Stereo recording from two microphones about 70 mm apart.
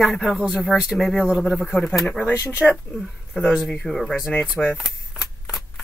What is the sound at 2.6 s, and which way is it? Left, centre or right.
Speech, centre.